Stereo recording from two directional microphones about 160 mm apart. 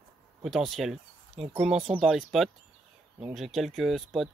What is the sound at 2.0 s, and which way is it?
Speech, centre (ahead or behind).